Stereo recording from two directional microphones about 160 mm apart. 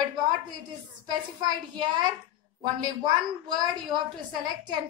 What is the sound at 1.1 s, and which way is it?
A woman's voice, 25° right (ahead or behind).